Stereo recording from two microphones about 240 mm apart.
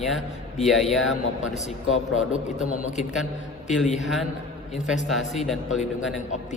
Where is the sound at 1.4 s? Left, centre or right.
Left.